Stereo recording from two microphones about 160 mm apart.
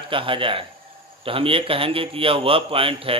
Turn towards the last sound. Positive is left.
turn(degrees=-35)  # may be behind; listen again after turning